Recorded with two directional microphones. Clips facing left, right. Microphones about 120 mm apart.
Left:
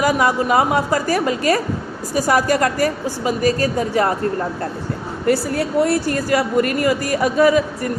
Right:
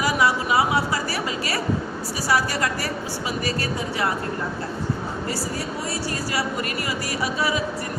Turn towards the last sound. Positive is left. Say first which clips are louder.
# left 10 dB
turn(degrees=50)  # may be behind; listen again after turning